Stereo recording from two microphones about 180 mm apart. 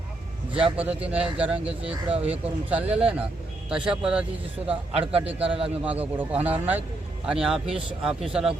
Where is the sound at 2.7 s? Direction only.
5° right (ahead or behind).